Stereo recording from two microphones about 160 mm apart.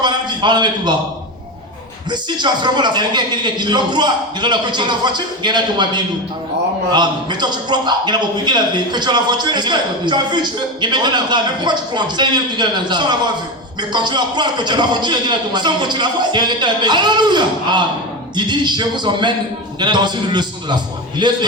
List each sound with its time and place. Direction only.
0.0 s a man's voice: 30° right (ahead or behind)
2.0 s a man's voice: 30° right (ahead or behind)